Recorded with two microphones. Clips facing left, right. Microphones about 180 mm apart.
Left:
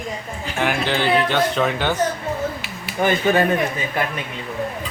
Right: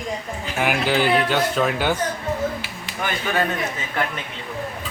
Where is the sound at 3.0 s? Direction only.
30° left (ahead or behind).